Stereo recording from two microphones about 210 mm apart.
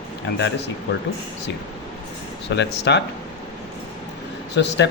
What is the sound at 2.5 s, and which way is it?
Speech, 55° left (ahead or behind).